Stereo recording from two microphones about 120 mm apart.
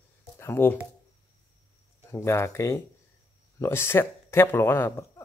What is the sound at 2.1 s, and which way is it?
Speech, 25° left (ahead or behind).